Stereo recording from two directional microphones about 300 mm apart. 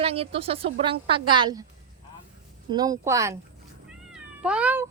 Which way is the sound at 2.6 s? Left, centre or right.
Centre.